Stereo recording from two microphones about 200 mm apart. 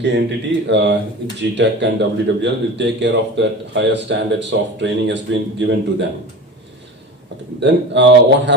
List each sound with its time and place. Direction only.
0.0 s speech: 60° right (ahead or behind)
7.6 s speech: 60° right (ahead or behind)